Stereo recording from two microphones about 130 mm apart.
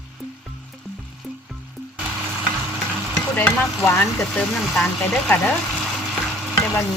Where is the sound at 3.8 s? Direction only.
20° left (ahead or behind).